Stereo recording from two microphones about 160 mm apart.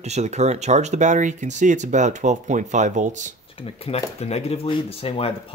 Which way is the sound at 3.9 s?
40° left (ahead or behind).